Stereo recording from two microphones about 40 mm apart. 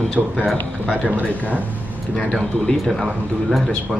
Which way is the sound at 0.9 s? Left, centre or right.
Right.